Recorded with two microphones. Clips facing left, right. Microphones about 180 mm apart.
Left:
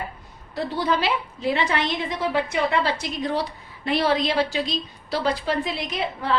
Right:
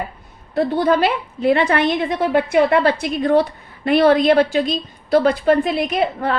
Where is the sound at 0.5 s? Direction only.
55° right (ahead or behind).